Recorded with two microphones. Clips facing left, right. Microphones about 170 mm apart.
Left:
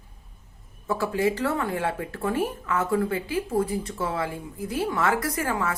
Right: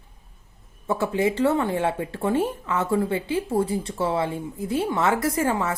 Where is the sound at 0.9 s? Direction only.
25° right (ahead or behind).